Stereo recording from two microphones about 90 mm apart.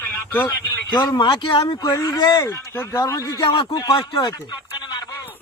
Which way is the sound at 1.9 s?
40° left (ahead or behind).